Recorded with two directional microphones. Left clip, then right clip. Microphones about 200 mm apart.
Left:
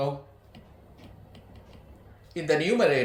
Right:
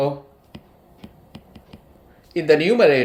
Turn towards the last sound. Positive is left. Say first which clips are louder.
# right 8 dB
turn(degrees=-40)  # may be behind; listen again after turning